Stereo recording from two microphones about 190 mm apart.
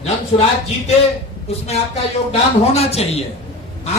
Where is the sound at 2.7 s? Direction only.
35° left (ahead or behind).